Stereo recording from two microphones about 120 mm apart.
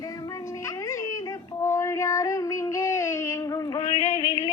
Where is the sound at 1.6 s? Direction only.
25° left (ahead or behind).